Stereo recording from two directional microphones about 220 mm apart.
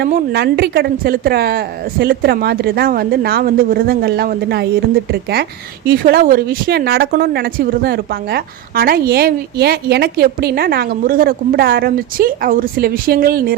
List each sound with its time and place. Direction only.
0.0 s a woman's voice: 45° right (ahead or behind)